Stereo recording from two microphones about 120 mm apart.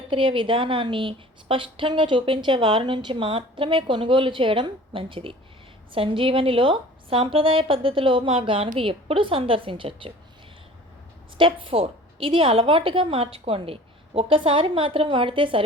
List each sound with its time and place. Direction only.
0.1 s a woman's voice: 45° right (ahead or behind)
11.3 s a woman's voice: 45° right (ahead or behind)